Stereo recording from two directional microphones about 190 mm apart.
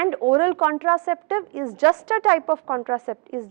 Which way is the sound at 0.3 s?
15° right (ahead or behind).